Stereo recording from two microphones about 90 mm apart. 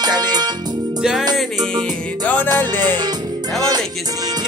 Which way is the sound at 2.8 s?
50° right (ahead or behind).